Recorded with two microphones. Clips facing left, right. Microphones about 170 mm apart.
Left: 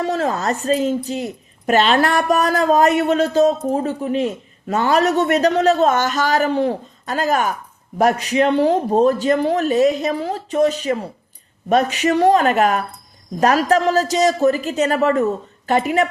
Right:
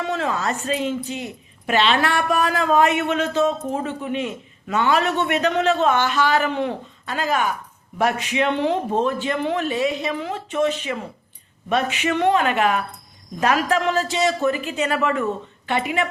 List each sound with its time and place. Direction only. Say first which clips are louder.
0.0 s speech: left 4 dB; 40° left (ahead or behind)